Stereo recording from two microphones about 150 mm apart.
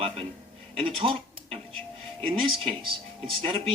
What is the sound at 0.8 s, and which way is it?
Speech, 35° right (ahead or behind).